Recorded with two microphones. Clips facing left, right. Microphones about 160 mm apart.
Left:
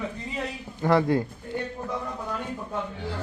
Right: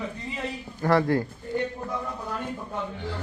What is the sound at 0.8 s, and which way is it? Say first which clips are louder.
Speech: even; 20° left (ahead or behind).